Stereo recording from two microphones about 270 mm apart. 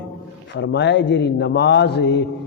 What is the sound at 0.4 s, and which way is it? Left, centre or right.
Mantra, left.